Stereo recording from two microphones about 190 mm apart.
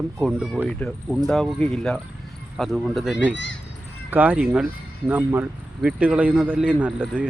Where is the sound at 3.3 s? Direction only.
70° left (ahead or behind).